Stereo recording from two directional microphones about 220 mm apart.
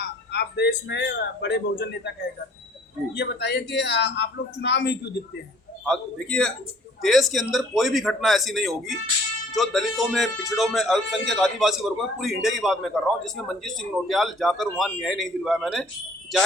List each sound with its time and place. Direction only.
0.0 s a man's voice: 50° left (ahead or behind)
3.2 s a man's voice: 50° left (ahead or behind)
5.8 s speech: 5° left (ahead or behind)